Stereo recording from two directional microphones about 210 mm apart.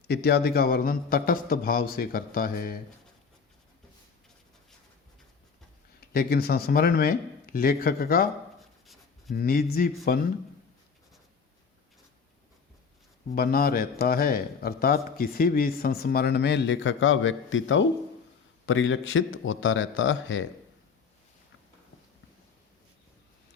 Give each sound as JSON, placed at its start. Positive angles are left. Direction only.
{"t": 0.1, "sound": "a man's voice", "side_deg": 50}
{"t": 6.0, "sound": "a man's voice", "side_deg": 45}
{"t": 9.3, "sound": "a man's voice", "side_deg": 45}
{"t": 13.3, "sound": "a man's voice", "side_deg": 45}